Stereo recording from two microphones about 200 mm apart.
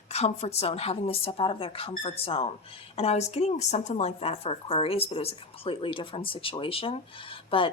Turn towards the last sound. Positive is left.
turn(degrees=25)  # may be behind; listen again after turning